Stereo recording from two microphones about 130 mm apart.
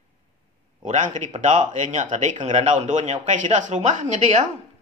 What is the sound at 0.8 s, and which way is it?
Speech, 65° right (ahead or behind).